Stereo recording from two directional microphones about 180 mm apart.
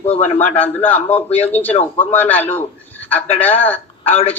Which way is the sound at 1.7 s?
35° left (ahead or behind).